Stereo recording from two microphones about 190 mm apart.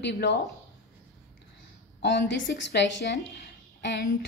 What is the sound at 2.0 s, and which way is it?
A woman's voice, 65° left (ahead or behind).